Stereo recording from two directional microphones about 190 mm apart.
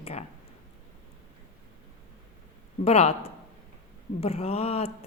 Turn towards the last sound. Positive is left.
turn(degrees=30)  # may be behind; listen again after turning